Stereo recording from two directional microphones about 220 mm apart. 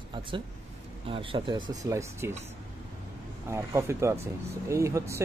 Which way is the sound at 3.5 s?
10° right (ahead or behind).